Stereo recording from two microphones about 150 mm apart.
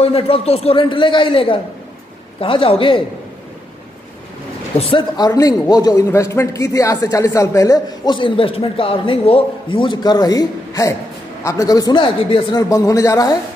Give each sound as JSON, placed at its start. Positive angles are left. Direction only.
{"t": 0.0, "sound": "a man's voice", "side_deg": 40}
{"t": 4.7, "sound": "a man's voice", "side_deg": 40}
{"t": 5.1, "sound": "a man's voice", "side_deg": 25}
{"t": 12.6, "sound": "a man's voice", "side_deg": 20}